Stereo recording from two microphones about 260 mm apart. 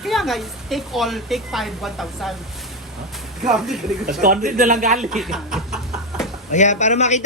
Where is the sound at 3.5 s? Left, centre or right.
Centre.